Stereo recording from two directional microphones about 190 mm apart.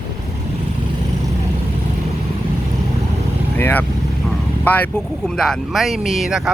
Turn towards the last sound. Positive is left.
turn(degrees=-5)  # may be behind; listen again after turning